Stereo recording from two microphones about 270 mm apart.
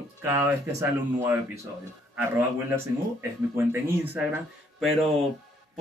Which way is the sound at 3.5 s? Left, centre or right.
Centre.